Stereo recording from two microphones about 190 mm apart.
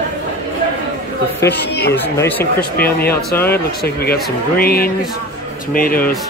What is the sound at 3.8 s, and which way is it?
Speech, 55° left (ahead or behind).